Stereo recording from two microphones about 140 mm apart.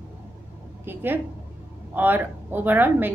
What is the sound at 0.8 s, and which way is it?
A woman's voice, 15° right (ahead or behind).